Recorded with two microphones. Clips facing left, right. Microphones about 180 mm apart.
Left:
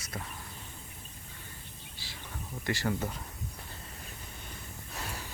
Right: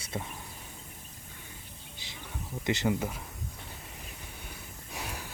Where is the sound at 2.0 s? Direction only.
20° right (ahead or behind).